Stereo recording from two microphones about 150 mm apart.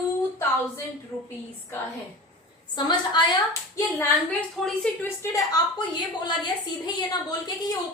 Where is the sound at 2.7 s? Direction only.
30° left (ahead or behind).